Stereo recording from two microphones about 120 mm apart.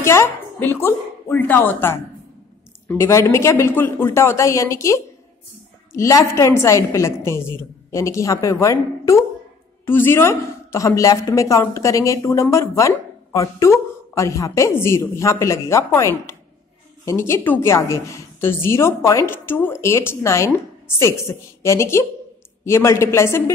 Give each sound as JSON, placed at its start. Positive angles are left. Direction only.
{"t": 0.0, "sound": "a woman's voice", "side_deg": 20}